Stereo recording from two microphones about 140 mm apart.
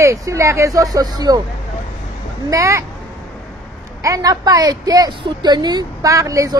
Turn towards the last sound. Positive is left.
turn(degrees=-25)  # may be behind; listen again after turning